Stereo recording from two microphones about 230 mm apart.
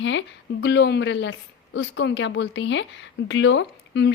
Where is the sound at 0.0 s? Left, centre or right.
Left.